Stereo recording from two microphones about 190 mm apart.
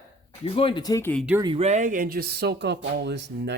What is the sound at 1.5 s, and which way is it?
Speech, 35° right (ahead or behind).